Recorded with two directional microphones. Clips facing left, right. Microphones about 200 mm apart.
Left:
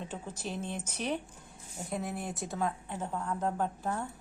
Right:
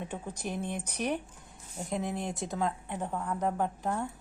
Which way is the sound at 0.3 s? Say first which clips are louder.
Right 3 dB; 15° right (ahead or behind).